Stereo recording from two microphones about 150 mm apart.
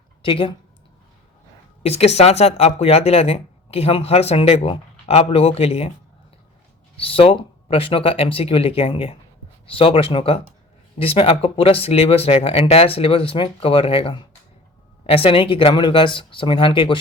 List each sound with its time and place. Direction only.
0.2 s speech: 35° left (ahead or behind)
1.8 s speech: 45° left (ahead or behind)
6.9 s speech: 40° left (ahead or behind)